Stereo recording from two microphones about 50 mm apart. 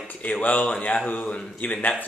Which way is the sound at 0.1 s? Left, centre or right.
Left.